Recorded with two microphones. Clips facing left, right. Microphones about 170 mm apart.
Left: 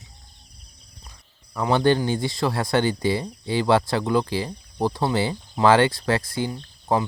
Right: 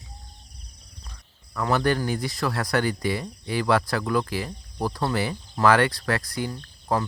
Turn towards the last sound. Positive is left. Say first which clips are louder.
# left 3 dB
turn(degrees=25)  # may be behind; listen again after turning